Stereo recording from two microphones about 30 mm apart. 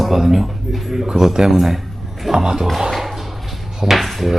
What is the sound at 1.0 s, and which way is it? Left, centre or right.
Speech, right.